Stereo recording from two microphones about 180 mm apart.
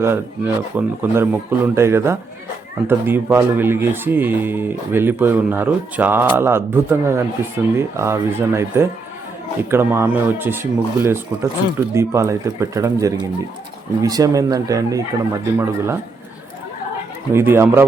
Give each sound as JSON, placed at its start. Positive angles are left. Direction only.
{"t": 0.0, "sound": "speech", "side_deg": -15}
{"t": 17.3, "sound": "speech", "side_deg": -15}